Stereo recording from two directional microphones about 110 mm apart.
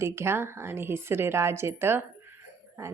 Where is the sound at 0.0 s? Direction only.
25° right (ahead or behind).